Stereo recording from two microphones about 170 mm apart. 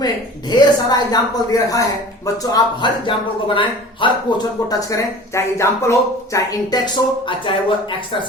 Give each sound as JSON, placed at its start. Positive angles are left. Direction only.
{"t": 0.0, "sound": "speech", "side_deg": 25}
{"t": 4.8, "sound": "speech", "side_deg": 20}